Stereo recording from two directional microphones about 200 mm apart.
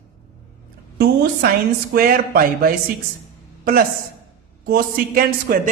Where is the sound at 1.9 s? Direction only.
45° right (ahead or behind).